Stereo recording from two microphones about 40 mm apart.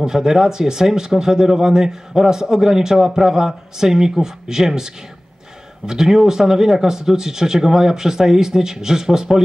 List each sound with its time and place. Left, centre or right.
0.0 s speech: centre